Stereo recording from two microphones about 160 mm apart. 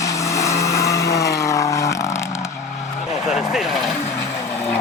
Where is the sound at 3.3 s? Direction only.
Centre (ahead or behind).